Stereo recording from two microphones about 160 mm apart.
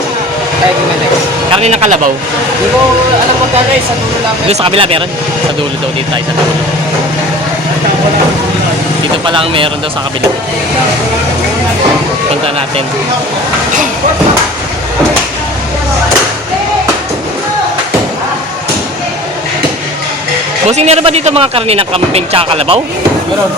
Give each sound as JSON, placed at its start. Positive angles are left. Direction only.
{"t": 1.5, "sound": "speech", "side_deg": -40}
{"t": 4.4, "sound": "speech", "side_deg": -35}
{"t": 9.2, "sound": "speech", "side_deg": -30}
{"t": 20.7, "sound": "speech", "side_deg": -40}